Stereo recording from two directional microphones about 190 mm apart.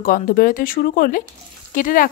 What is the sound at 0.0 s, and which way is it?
Speech, 50° left (ahead or behind).